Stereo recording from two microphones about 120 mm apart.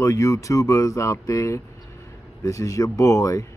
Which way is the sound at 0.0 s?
25° left (ahead or behind).